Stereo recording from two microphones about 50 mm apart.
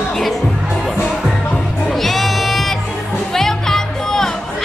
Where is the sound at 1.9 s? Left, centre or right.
Centre.